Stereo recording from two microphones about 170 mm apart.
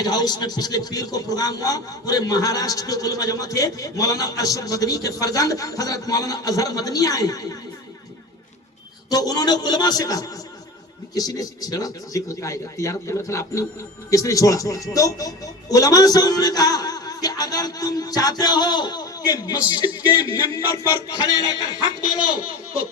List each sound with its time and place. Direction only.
0.0 s a man's voice: 25° left (ahead or behind)
9.0 s a man's voice: 20° left (ahead or behind)